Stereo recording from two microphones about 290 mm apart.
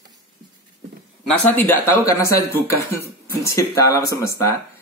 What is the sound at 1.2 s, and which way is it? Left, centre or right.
Speech, centre.